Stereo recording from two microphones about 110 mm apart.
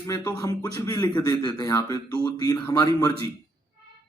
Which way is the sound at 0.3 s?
35° left (ahead or behind).